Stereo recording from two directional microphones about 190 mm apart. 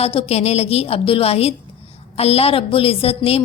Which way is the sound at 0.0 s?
30° left (ahead or behind).